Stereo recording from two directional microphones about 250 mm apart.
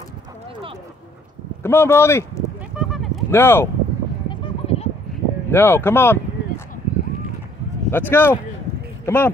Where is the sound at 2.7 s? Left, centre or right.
Centre.